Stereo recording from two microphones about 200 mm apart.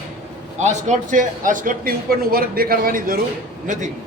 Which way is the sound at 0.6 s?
35° right (ahead or behind).